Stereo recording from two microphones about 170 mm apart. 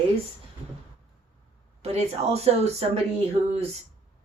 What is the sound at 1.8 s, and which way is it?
Speech, 40° right (ahead or behind).